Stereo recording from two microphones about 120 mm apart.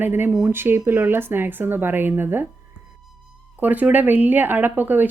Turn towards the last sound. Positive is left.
turn(degrees=-15)  # may be behind; listen again after turning